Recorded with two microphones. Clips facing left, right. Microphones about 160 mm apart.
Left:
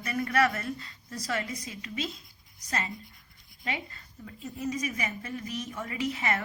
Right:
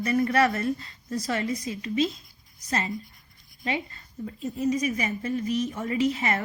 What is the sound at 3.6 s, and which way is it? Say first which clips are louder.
A woman's voice: right 6 dB; 30° right (ahead or behind).